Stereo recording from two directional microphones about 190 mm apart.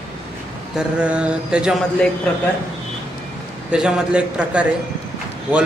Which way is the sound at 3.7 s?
5° right (ahead or behind).